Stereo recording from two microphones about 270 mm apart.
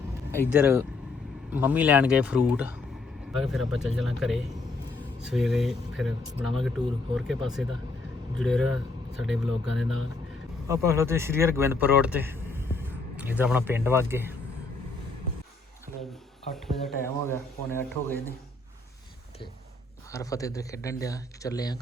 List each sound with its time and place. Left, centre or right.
0.5 s speech: centre
16.5 s speech: centre
20.1 s speech: centre